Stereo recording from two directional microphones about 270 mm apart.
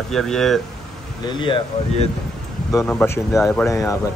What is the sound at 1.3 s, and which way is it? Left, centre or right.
Speech, centre.